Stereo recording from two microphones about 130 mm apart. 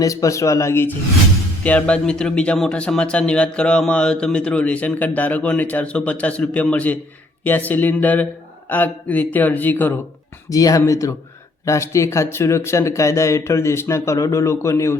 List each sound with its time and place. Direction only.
0.0 s speech: 25° left (ahead or behind)
10.5 s speech: 25° left (ahead or behind)